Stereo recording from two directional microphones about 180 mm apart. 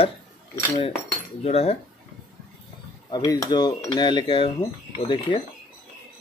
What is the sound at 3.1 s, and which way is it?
Speech, 20° left (ahead or behind).